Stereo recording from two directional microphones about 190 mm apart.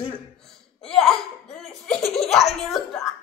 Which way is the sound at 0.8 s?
5° left (ahead or behind).